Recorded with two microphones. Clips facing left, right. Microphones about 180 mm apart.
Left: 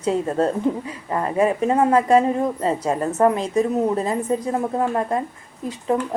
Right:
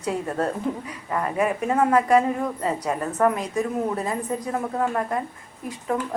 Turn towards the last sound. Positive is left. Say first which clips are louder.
# left 4 dB
turn(degrees=25)  # may be behind; listen again after turning